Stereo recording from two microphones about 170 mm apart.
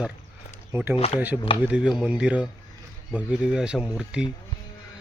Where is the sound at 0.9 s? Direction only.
35° left (ahead or behind).